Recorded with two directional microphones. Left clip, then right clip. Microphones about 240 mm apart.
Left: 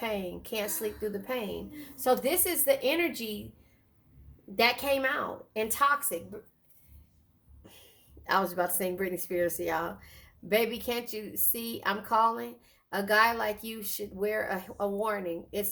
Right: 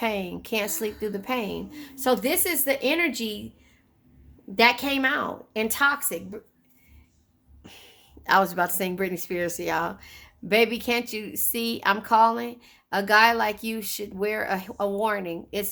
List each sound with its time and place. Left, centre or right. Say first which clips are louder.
0.0 s a woman's voice: right 6 dB; right
4.5 s a woman's voice: right 5 dB; right
7.6 s a woman's voice: right 8 dB; right